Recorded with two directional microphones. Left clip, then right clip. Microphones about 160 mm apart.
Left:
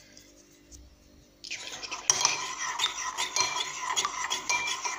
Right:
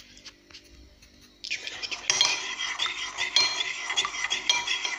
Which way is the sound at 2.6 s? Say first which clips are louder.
Even; 10° left (ahead or behind).